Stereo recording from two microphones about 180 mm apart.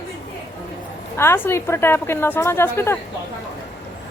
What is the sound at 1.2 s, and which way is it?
A woman's voice, 15° left (ahead or behind).